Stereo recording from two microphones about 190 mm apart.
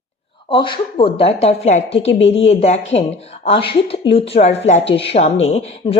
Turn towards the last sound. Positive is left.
turn(degrees=35)  # may be behind; listen again after turning